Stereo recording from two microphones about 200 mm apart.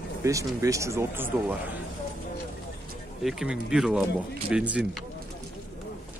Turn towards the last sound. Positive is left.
turn(degrees=-5)  # may be behind; listen again after turning